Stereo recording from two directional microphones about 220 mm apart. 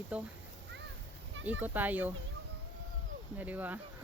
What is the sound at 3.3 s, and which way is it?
Speech, 10° right (ahead or behind).